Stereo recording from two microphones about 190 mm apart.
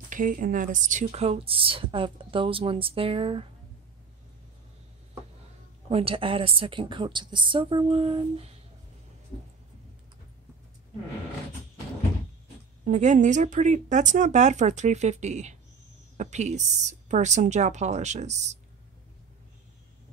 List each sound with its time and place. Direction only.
0.1 s a woman's voice: 45° right (ahead or behind); by 3.4 s 30° right (ahead or behind)
5.9 s a woman's voice: 30° right (ahead or behind)
12.8 s a woman's voice: 40° right (ahead or behind)